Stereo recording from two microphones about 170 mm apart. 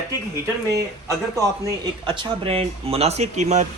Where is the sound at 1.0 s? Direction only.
20° right (ahead or behind).